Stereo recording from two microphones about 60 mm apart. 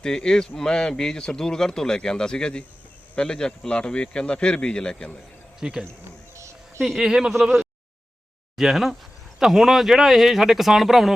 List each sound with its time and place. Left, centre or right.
0.0 s speech: centre
5.6 s speech: centre
6.3 s a sound: right
6.8 s speech: centre